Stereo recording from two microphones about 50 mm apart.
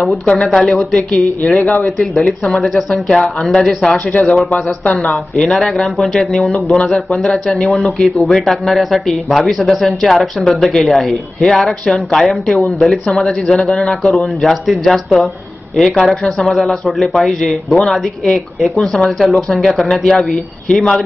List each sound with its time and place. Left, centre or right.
0.3 s speech: left
0.6 s speech: centre
1.1 s speech: left
1.8 s speech: centre
3.1 s speech: centre
4.1 s speech: left
4.9 s speech: centre
10.6 s speech: centre
10.9 s a man's voice: centre